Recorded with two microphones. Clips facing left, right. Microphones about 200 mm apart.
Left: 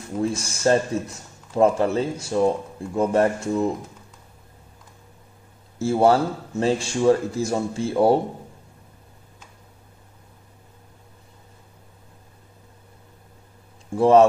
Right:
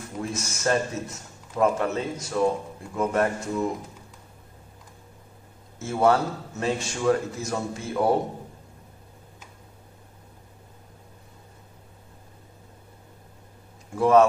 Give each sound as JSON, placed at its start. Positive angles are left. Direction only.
{"t": 0.2, "sound": "a man's voice", "side_deg": 30}
{"t": 5.8, "sound": "a man's voice", "side_deg": 30}
{"t": 13.9, "sound": "a man's voice", "side_deg": 30}